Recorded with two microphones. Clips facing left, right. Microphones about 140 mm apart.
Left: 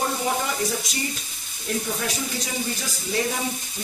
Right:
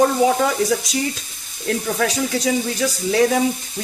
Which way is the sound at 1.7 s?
90° right.